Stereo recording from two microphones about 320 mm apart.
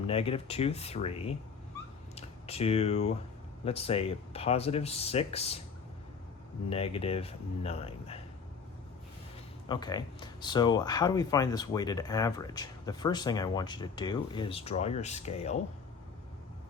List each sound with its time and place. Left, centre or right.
0.1 s speech: centre
6.7 s speech: centre
9.6 s speech: centre